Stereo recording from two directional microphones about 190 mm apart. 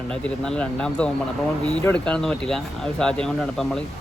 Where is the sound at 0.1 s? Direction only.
5° left (ahead or behind).